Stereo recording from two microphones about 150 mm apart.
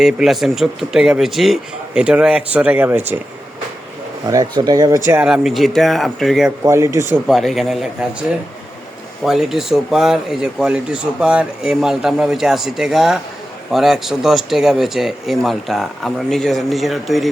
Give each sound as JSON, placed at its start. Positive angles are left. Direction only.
{"t": 0.0, "sound": "speech", "side_deg": 0}
{"t": 4.3, "sound": "speech", "side_deg": -25}
{"t": 5.2, "sound": "speech", "side_deg": -5}
{"t": 6.6, "sound": "speech", "side_deg": -20}
{"t": 7.3, "sound": "speech", "side_deg": 0}
{"t": 9.2, "sound": "speech", "side_deg": 0}